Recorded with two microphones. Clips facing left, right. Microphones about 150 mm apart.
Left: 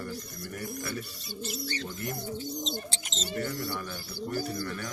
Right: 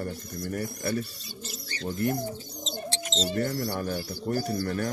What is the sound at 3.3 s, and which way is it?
Speech, 40° right (ahead or behind).